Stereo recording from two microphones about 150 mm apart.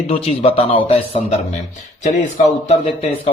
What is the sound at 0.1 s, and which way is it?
Speech, 40° left (ahead or behind).